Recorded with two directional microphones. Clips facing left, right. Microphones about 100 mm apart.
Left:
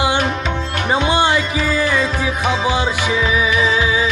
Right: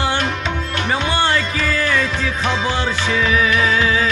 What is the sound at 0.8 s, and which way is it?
Music, 20° left (ahead or behind).